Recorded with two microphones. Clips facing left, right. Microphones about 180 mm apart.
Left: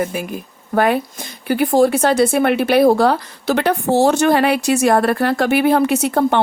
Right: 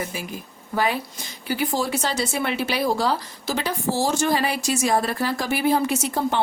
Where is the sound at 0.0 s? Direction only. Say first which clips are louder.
Left 8 dB; 55° left (ahead or behind).